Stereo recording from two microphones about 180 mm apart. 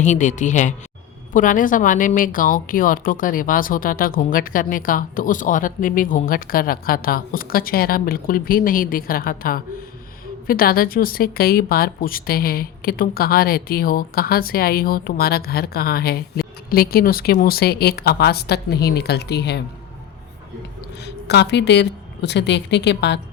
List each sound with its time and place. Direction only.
0.0 s a woman's voice: 45° left (ahead or behind); by 19.6 s 70° left (ahead or behind)
21.2 s a woman's voice: 70° left (ahead or behind)